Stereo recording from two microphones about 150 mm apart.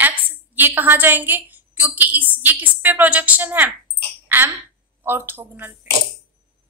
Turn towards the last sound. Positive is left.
turn(degrees=-15)  # may be behind; listen again after turning